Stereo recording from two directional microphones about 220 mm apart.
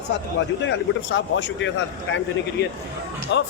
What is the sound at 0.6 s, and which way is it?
Speech, 55° left (ahead or behind).